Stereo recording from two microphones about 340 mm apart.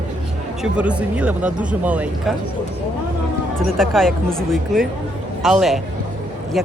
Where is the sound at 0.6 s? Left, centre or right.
Centre.